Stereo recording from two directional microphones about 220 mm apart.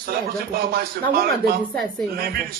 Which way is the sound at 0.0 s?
45° right (ahead or behind).